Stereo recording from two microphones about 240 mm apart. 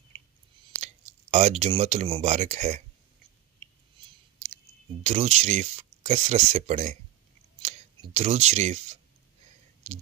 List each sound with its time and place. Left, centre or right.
1.3 s speech: right
5.0 s speech: right
7.6 s clicking: right
9.8 s speech: right